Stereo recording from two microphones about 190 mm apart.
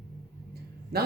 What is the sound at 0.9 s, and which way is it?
Speech, 55° right (ahead or behind).